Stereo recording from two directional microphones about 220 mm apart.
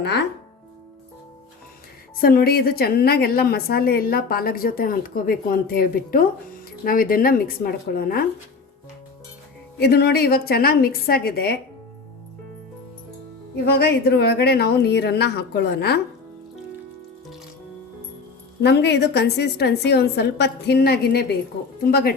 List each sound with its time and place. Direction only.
0.0 s a woman's voice: 50° left (ahead or behind)
2.1 s a woman's voice: 40° left (ahead or behind)
9.7 s a woman's voice: 45° left (ahead or behind)
13.7 s a woman's voice: 45° left (ahead or behind)
18.6 s a woman's voice: 50° left (ahead or behind)